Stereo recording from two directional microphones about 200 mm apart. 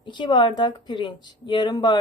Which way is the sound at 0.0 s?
25° left (ahead or behind).